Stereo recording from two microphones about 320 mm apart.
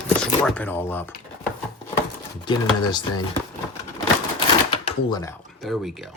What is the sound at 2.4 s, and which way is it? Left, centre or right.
Speech, centre.